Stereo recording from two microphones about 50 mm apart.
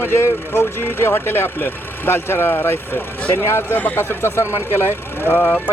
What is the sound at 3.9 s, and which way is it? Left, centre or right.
Speech, left.